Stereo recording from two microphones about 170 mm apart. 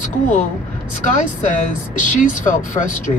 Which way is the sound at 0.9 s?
45° left (ahead or behind).